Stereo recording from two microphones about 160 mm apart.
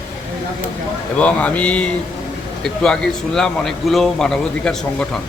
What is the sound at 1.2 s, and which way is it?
A man's voice, 10° left (ahead or behind).